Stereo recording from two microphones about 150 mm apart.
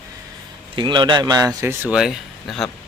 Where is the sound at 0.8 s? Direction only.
30° right (ahead or behind).